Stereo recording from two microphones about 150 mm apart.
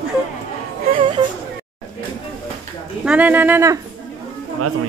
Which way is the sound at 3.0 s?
10° right (ahead or behind).